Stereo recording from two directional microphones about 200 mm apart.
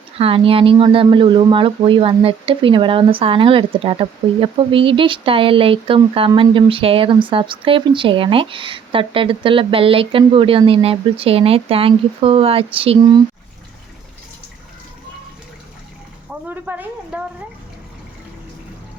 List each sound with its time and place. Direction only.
0.2 s speech: 30° right (ahead or behind)
16.5 s speech: 10° right (ahead or behind)